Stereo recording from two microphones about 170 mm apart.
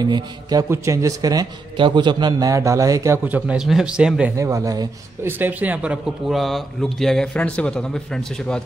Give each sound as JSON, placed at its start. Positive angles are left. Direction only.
{"t": 0.0, "sound": "a man's voice", "side_deg": -20}
{"t": 4.4, "sound": "speech", "side_deg": -20}